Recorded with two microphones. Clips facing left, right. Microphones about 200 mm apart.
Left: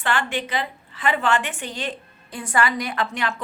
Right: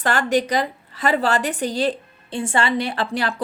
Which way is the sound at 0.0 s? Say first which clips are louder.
Right 6 dB; 40° right (ahead or behind).